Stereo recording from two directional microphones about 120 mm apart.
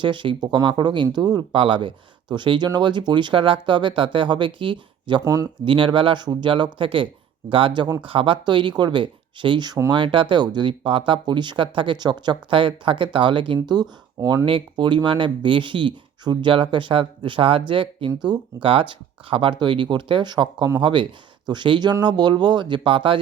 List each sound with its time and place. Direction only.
0.0 s speech: 40° right (ahead or behind)
1.5 s speech: 45° right (ahead or behind)
5.2 s speech: 30° right (ahead or behind)
5.6 s speech: 45° right (ahead or behind)
9.9 s speech: 45° right (ahead or behind)
14.2 s speech: 25° right (ahead or behind)
14.4 s speech: 45° right (ahead or behind)